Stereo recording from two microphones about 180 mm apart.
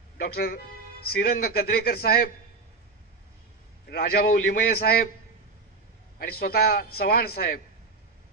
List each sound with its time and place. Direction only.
0.2 s a man's voice: 55° left (ahead or behind)
3.9 s a man's voice: 60° left (ahead or behind)
6.1 s a man's voice: 55° left (ahead or behind)